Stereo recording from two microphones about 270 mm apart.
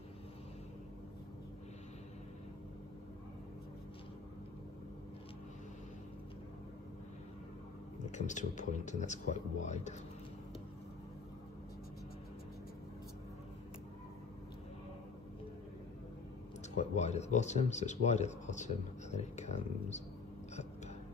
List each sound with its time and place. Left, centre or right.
8.1 s speech: left
16.7 s speech: left